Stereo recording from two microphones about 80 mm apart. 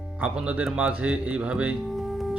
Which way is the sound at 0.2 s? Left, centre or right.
Centre.